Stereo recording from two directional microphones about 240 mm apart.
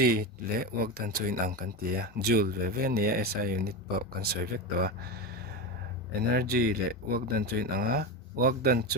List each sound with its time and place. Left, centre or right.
0.0 s speech: right
6.3 s speech: right